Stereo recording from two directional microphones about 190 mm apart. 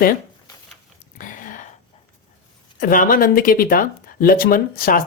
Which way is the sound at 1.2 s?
45° left (ahead or behind).